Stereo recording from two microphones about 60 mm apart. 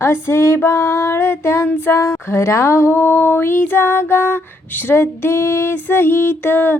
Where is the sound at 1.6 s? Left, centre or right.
Left.